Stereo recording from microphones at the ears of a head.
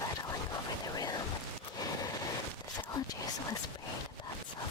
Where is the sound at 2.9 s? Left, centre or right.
Left.